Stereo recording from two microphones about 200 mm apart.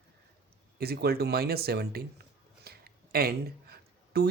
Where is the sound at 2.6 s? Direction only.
50° right (ahead or behind).